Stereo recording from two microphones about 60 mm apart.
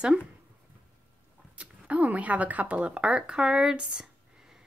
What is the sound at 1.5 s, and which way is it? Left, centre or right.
Speech, right.